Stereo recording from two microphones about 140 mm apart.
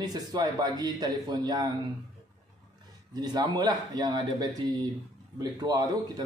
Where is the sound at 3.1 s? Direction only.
30° right (ahead or behind).